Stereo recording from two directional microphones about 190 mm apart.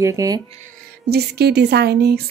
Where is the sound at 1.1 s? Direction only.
60° right (ahead or behind).